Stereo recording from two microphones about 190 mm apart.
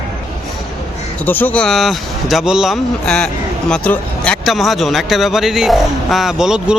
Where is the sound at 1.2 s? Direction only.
10° left (ahead or behind).